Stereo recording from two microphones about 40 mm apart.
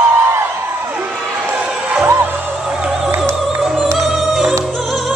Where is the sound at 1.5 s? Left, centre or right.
Centre.